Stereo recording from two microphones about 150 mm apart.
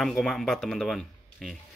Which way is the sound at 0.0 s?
Centre (ahead or behind).